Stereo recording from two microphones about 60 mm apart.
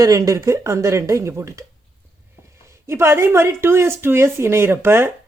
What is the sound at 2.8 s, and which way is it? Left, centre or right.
Speech, right.